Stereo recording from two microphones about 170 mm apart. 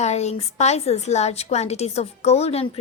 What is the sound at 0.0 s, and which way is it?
A woman's voice, 40° left (ahead or behind).